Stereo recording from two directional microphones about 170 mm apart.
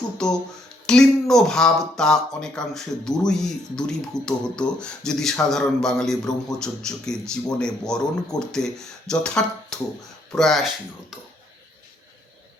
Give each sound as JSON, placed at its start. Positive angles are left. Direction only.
{"t": 0.9, "sound": "a man's voice", "side_deg": 5}